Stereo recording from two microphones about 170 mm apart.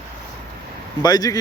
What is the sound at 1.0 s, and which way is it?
Speech, 25° left (ahead or behind).